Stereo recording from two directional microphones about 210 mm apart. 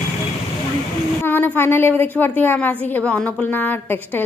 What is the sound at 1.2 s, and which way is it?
A woman's voice, 10° left (ahead or behind).